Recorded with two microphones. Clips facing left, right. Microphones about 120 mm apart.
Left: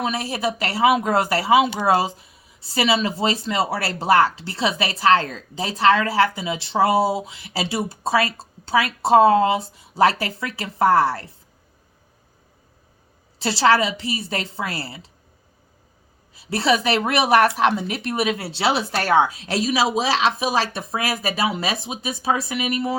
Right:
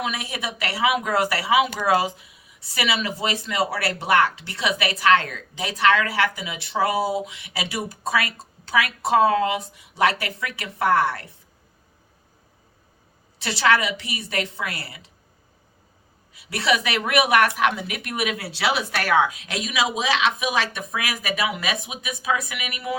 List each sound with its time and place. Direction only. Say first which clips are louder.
0.0 s speech: left 5 dB; 35° left (ahead or behind)
13.4 s speech: left 3 dB; 30° left (ahead or behind)
16.3 s speech: left 3 dB; 30° left (ahead or behind)